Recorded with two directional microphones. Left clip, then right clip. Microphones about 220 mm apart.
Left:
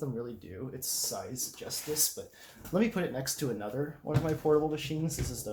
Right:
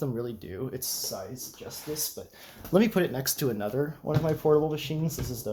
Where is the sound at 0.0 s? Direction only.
50° right (ahead or behind).